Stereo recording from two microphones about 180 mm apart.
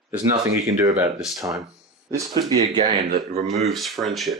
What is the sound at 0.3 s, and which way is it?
Speech, 15° right (ahead or behind).